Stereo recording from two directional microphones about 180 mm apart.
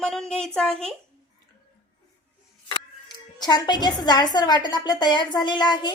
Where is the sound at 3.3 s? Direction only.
20° left (ahead or behind).